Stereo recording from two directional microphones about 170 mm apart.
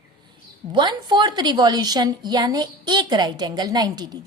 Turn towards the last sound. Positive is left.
turn(degrees=-25)  # may be behind; listen again after turning